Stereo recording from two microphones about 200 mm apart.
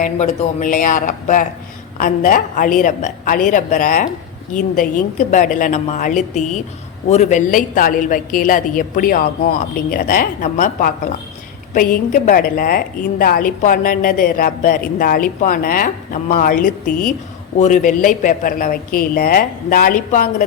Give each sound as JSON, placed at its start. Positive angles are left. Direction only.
{"t": 0.0, "sound": "a woman's voice", "side_deg": 35}
{"t": 16.8, "sound": "a woman's voice", "side_deg": 5}
{"t": 17.6, "sound": "a woman's voice", "side_deg": 40}